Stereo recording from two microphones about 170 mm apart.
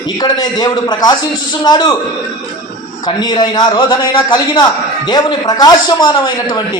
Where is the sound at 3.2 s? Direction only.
25° left (ahead or behind).